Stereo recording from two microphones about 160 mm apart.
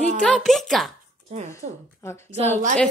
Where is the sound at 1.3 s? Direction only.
40° right (ahead or behind).